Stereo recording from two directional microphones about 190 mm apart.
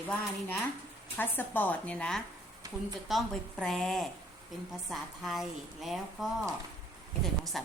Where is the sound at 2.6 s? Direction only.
20° right (ahead or behind).